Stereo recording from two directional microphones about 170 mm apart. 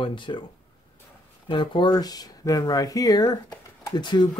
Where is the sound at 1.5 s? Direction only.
30° left (ahead or behind).